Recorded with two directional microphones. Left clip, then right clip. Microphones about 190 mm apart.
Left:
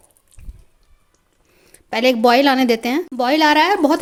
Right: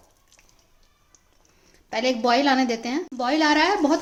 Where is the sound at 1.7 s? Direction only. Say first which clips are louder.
Left 7 dB; 55° left (ahead or behind).